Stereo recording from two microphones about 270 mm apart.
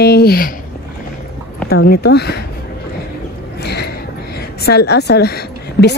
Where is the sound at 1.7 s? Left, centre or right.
Left.